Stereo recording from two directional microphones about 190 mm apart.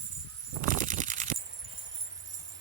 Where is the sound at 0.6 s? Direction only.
45° right (ahead or behind).